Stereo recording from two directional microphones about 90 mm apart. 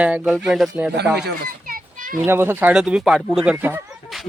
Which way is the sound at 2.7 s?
10° right (ahead or behind).